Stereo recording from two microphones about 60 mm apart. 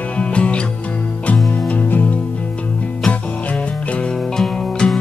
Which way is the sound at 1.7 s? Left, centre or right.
Left.